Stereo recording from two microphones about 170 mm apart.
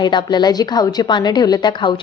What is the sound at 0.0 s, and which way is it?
A woman's voice, 25° left (ahead or behind).